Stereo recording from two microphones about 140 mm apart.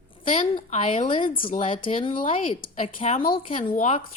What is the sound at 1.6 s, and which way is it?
A woman's voice, 40° left (ahead or behind).